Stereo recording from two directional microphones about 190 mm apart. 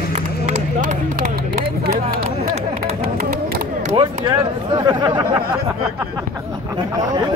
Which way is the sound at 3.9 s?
25° right (ahead or behind).